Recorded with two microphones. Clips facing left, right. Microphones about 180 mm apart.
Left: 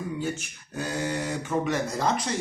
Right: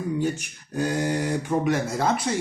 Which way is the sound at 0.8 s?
15° right (ahead or behind).